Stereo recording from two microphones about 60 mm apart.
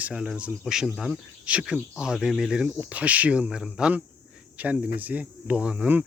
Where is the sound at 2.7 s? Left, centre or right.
Right.